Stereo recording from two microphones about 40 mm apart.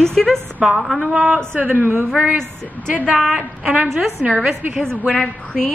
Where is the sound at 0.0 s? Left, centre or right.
Centre.